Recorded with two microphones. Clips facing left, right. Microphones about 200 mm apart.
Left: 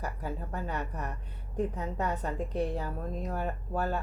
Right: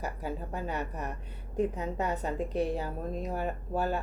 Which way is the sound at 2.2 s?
25° right (ahead or behind).